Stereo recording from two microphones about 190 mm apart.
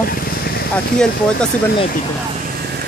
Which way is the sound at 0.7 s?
5° left (ahead or behind).